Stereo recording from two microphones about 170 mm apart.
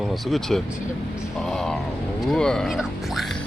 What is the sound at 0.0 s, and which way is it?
Speech, centre (ahead or behind).